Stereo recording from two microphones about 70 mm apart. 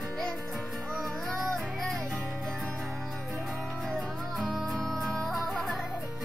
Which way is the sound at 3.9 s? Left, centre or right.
Centre.